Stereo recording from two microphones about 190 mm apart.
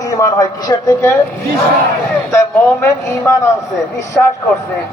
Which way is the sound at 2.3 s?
15° left (ahead or behind).